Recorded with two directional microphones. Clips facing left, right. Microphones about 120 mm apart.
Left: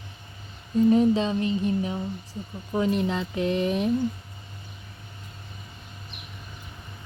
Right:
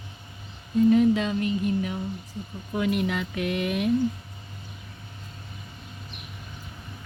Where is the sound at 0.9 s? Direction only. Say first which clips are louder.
Even; 30° left (ahead or behind).